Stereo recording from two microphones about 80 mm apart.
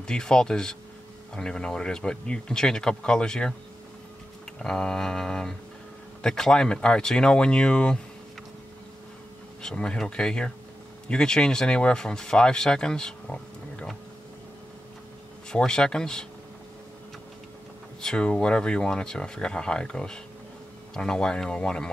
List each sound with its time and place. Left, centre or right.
0.0 s speech: centre
4.6 s speech: centre
9.6 s speech: centre
15.5 s speech: centre
18.0 s speech: centre